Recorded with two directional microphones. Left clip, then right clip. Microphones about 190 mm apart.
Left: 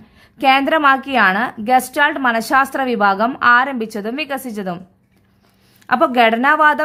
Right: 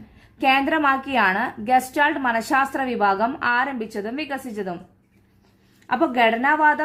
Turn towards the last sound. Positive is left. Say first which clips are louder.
# left 5 dB
turn(degrees=40)  # may be behind; listen again after turning